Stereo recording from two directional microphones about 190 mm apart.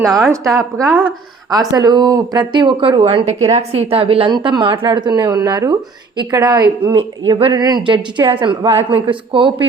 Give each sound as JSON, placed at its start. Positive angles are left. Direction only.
{"t": 0.4, "sound": "a woman's voice", "side_deg": -15}
{"t": 0.9, "sound": "speech", "side_deg": 5}
{"t": 1.5, "sound": "a woman's voice", "side_deg": -20}